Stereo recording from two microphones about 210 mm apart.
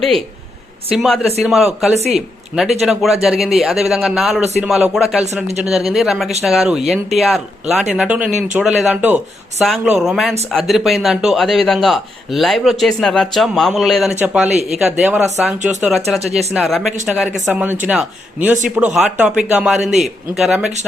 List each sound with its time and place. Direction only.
0.9 s a man's voice: centre (ahead or behind)